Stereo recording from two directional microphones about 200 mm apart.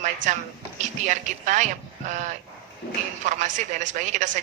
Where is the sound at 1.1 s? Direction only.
35° right (ahead or behind).